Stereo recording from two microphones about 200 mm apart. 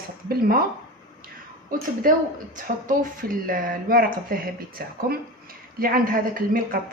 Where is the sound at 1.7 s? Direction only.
45° right (ahead or behind).